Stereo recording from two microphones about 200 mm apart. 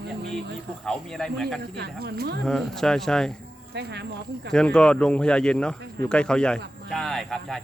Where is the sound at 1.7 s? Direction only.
55° right (ahead or behind).